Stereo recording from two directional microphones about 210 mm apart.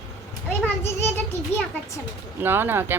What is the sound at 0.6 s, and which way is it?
A child's voice, 10° left (ahead or behind).